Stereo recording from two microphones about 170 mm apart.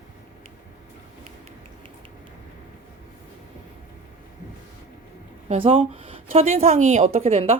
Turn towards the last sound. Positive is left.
turn(degrees=-35)  # may be behind; listen again after turning